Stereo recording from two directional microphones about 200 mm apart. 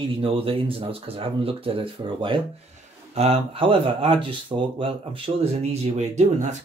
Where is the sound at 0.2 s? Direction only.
25° right (ahead or behind).